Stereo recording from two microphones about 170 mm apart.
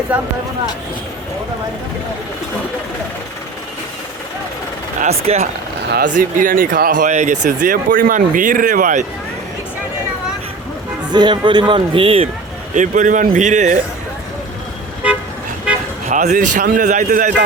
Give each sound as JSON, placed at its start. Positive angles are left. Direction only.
{"t": 0.1, "sound": "speech", "side_deg": -5}
{"t": 4.9, "sound": "speech", "side_deg": -40}
{"t": 5.8, "sound": "speech", "side_deg": -75}
{"t": 6.1, "sound": "speech", "side_deg": -50}
{"t": 11.1, "sound": "a man's voice", "side_deg": -25}
{"t": 12.7, "sound": "speech", "side_deg": -50}
{"t": 16.0, "sound": "speech", "side_deg": -45}